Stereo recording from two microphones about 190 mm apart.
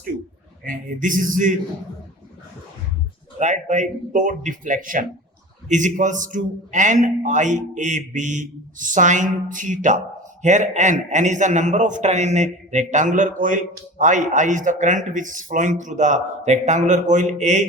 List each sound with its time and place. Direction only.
0.6 s speech: 45° right (ahead or behind)
3.3 s a man's voice: 40° right (ahead or behind)